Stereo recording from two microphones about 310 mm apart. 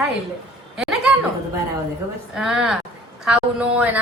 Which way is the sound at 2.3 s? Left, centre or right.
Centre.